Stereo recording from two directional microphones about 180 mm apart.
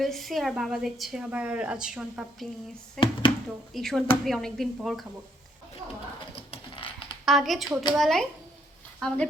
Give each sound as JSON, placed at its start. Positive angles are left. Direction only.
{"t": 0.0, "sound": "a woman's voice", "side_deg": 0}
{"t": 6.3, "sound": "typing", "side_deg": 30}
{"t": 7.3, "sound": "a woman's voice", "side_deg": 0}